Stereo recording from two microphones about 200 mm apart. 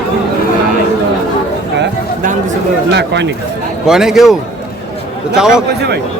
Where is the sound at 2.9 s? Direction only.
60° right (ahead or behind).